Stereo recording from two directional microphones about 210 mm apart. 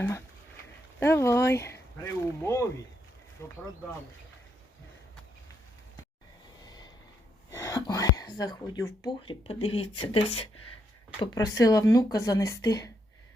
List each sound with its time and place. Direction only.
0.9 s speech: 10° left (ahead or behind)
7.5 s speech: 15° left (ahead or behind)